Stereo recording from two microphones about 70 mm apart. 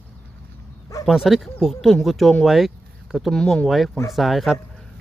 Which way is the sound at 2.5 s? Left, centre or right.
Centre.